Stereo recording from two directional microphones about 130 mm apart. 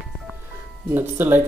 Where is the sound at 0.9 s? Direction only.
15° right (ahead or behind).